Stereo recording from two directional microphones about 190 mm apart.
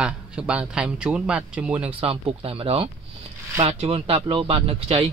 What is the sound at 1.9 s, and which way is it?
A man's voice, 30° right (ahead or behind).